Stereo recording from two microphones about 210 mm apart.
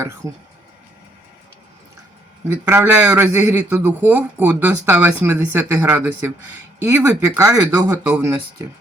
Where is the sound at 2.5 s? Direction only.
10° right (ahead or behind).